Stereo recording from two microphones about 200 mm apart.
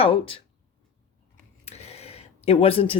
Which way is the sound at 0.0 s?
25° left (ahead or behind).